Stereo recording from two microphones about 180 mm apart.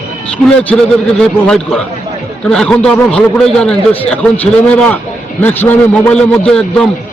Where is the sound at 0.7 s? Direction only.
5° left (ahead or behind).